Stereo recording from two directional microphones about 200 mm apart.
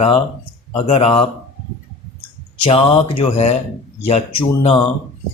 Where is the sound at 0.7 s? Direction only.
30° left (ahead or behind).